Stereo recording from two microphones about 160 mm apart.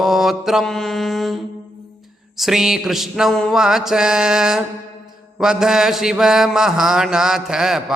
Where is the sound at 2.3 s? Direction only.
Centre (ahead or behind).